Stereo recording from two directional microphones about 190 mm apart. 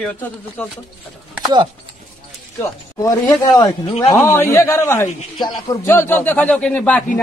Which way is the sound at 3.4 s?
20° left (ahead or behind).